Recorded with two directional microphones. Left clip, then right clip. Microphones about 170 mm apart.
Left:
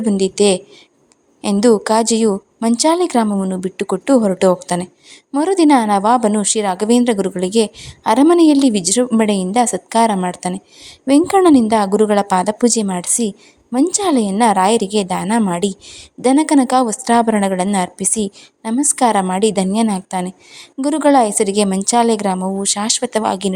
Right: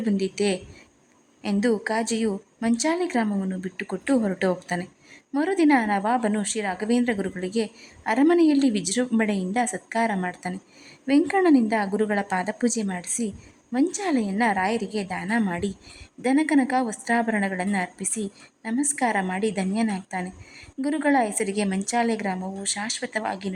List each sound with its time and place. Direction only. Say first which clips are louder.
0.0 s a woman's voice: left 11 dB; 20° left (ahead or behind)